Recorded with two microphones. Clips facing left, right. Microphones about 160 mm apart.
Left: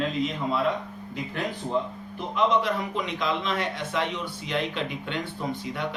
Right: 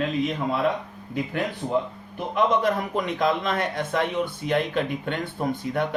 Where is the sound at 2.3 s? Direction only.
50° right (ahead or behind).